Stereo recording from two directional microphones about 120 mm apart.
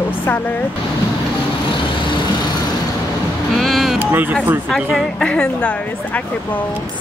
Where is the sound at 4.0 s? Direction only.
15° right (ahead or behind).